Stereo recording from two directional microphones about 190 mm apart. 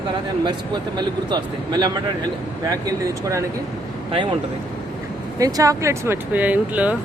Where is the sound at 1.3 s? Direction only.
25° right (ahead or behind).